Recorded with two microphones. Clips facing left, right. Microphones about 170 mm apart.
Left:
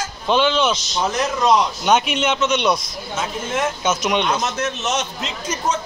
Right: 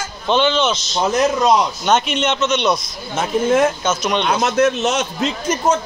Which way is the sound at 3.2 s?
55° right (ahead or behind).